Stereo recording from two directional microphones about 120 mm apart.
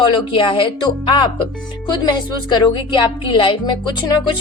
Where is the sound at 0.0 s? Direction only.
45° left (ahead or behind).